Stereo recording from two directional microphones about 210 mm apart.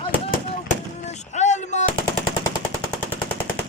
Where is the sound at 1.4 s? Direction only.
35° left (ahead or behind).